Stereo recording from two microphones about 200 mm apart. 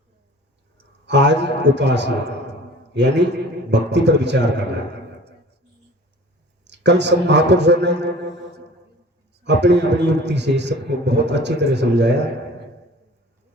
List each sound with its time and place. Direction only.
1.0 s a man's voice: 60° right (ahead or behind)
6.7 s a man's voice: 60° right (ahead or behind)
9.4 s a man's voice: 60° right (ahead or behind)